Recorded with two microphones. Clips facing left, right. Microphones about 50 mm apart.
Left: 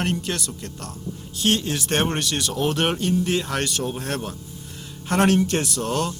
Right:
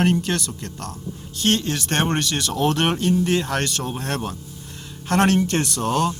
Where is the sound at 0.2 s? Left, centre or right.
Centre.